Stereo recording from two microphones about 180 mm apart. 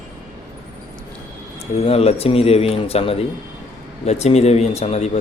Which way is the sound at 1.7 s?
35° left (ahead or behind).